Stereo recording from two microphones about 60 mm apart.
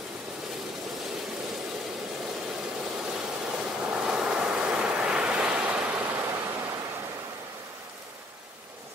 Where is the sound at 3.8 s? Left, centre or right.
Centre.